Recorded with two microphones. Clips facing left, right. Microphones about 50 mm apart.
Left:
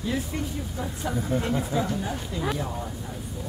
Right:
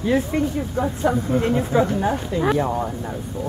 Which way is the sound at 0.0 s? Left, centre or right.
Right.